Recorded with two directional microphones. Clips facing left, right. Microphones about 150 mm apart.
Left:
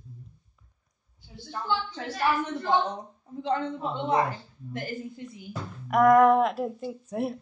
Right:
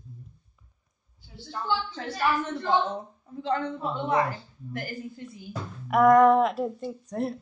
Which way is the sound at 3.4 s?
20° left (ahead or behind).